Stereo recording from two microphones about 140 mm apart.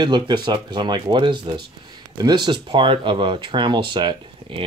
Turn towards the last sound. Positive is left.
turn(degrees=-35)  # may be behind; listen again after turning